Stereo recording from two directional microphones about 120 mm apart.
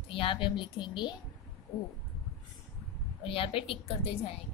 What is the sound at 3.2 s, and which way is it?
Speech, 50° left (ahead or behind).